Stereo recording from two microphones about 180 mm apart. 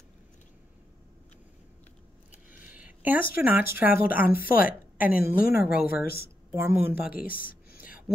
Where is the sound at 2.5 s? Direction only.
10° right (ahead or behind).